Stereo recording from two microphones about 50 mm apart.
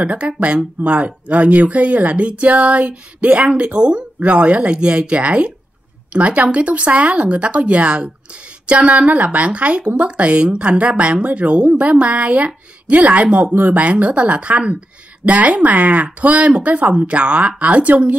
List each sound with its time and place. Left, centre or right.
0.0 s speech: right